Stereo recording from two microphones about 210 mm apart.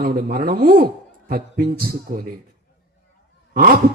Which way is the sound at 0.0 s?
40° right (ahead or behind).